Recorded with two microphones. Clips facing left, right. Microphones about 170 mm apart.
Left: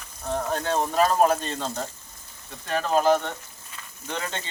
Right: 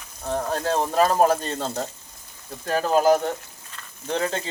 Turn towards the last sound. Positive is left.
turn(degrees=-35)  # may be behind; listen again after turning